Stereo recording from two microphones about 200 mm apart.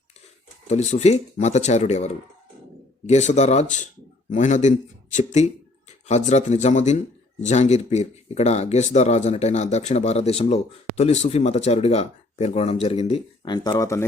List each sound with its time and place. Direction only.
0.7 s speech: 35° left (ahead or behind); by 14.0 s 15° left (ahead or behind)